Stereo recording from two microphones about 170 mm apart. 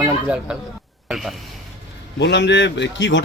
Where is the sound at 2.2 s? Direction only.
90° left.